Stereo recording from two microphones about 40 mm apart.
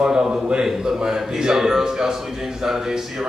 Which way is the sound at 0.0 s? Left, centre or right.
Centre.